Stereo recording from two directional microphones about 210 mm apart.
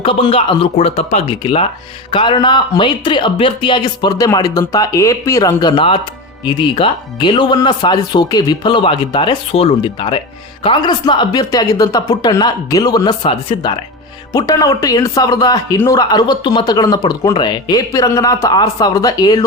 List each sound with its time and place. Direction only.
0.0 s speech: 25° left (ahead or behind)